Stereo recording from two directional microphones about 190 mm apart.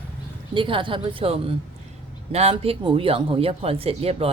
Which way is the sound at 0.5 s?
25° right (ahead or behind).